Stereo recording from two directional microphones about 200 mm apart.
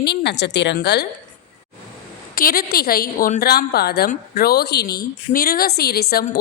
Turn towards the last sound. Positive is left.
turn(degrees=50)  # may be behind; listen again after turning